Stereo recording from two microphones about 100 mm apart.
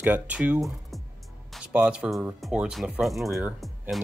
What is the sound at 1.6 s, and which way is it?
Speech, 10° right (ahead or behind).